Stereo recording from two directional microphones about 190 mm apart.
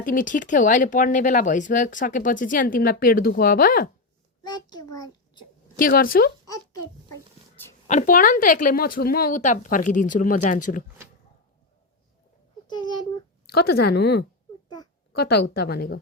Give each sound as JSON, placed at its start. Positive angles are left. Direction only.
{"t": 0.0, "sound": "speech", "side_deg": 45}
{"t": 4.4, "sound": "a child's voice", "side_deg": 20}
{"t": 5.7, "sound": "speech", "side_deg": 50}
{"t": 7.9, "sound": "speech", "side_deg": 40}
{"t": 12.6, "sound": "a sound", "side_deg": 25}
{"t": 13.5, "sound": "speech", "side_deg": 55}